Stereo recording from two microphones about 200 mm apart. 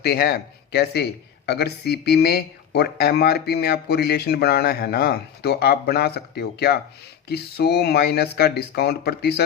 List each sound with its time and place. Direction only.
0.0 s speech: 50° left (ahead or behind)